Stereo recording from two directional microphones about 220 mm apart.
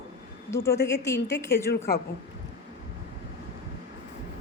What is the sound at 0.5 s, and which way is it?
Speech, 10° left (ahead or behind).